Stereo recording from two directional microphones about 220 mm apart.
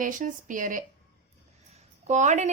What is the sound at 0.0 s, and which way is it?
Speech, 35° right (ahead or behind).